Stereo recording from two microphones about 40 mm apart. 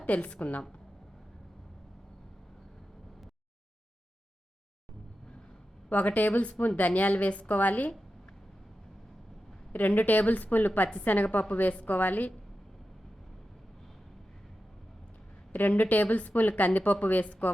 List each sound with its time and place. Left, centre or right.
0.0 s a woman's voice: left
5.9 s a woman's voice: left
9.7 s a woman's voice: left
15.7 s a woman's voice: left